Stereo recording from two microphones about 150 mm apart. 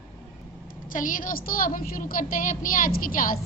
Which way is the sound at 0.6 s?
65° left (ahead or behind).